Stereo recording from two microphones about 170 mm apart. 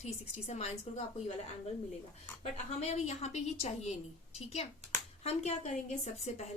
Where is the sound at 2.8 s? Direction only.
40° left (ahead or behind).